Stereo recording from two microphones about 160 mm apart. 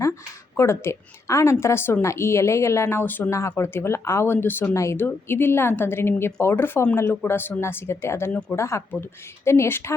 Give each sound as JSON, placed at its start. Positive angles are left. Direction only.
{"t": 0.5, "sound": "speech", "side_deg": 15}